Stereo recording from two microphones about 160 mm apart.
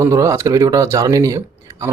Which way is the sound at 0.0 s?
20° right (ahead or behind).